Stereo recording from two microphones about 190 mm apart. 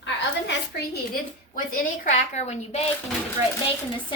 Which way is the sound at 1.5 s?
45° left (ahead or behind).